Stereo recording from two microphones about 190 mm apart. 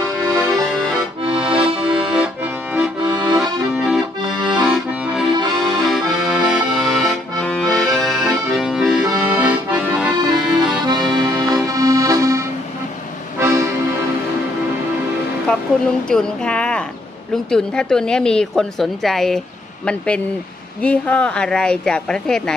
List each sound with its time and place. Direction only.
0.2 s accordion: centre (ahead or behind)
11.5 s accordion: 20° right (ahead or behind)
16.1 s a woman's voice: 5° left (ahead or behind)
20.8 s a woman's voice: 5° left (ahead or behind)